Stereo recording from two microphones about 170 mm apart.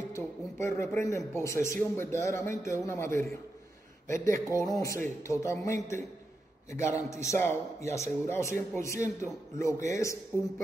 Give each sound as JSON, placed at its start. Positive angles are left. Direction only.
{"t": 0.1, "sound": "a man's voice", "side_deg": 15}